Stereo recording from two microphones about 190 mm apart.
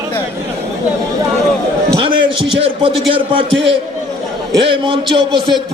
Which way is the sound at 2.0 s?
30° right (ahead or behind).